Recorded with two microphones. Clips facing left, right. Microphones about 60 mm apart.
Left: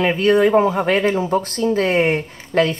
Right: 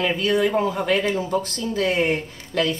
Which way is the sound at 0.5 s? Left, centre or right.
Left.